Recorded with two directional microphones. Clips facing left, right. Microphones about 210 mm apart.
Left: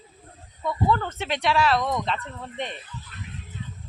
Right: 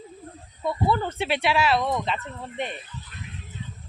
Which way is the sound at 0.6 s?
10° right (ahead or behind).